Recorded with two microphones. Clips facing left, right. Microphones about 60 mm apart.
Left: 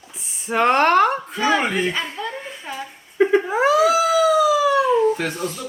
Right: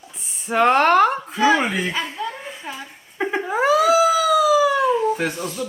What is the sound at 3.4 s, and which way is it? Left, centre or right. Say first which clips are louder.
Cat: even; centre.